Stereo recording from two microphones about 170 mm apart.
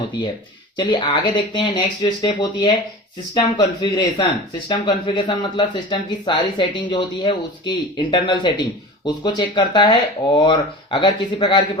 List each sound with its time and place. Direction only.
0.8 s speech: 30° left (ahead or behind)